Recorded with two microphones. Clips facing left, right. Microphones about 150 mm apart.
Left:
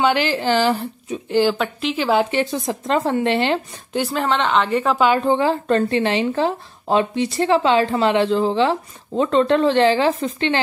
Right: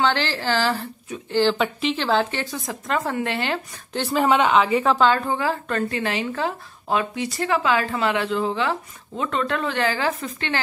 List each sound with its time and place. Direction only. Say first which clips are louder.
0.0 s a woman's voice: left 4 dB; 15° left (ahead or behind)
1.6 s a woman's voice: left 1 dB; centre (ahead or behind)
2.0 s speech: left 7 dB; 15° left (ahead or behind)
4.1 s a woman's voice: right 3 dB; 5° right (ahead or behind)
4.9 s a woman's voice: left 3 dB; 10° left (ahead or behind)
5.2 s speech: left 6 dB; 25° left (ahead or behind)